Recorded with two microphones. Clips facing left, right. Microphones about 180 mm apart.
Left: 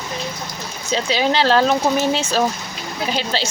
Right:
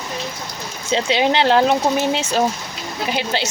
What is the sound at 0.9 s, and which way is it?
Speech, 20° right (ahead or behind).